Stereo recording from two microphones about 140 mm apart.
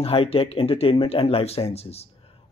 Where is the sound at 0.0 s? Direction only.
45° left (ahead or behind).